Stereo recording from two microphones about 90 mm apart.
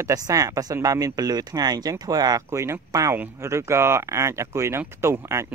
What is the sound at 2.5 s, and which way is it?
Speech, 30° right (ahead or behind).